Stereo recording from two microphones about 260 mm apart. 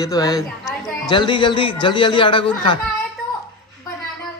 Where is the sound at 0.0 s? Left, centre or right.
Centre.